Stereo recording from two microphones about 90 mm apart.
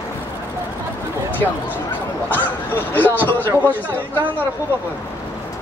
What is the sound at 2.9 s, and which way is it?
Speech, 20° left (ahead or behind).